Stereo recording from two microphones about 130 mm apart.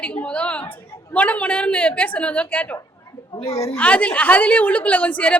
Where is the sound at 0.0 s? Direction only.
10° left (ahead or behind).